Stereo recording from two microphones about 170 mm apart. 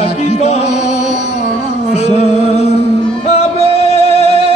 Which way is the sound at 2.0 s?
40° left (ahead or behind).